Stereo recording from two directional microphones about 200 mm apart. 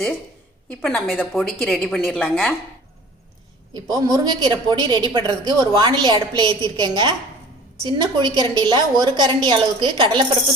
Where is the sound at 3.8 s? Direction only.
20° right (ahead or behind).